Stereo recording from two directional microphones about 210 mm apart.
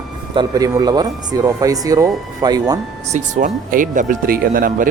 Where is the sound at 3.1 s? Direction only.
35° right (ahead or behind).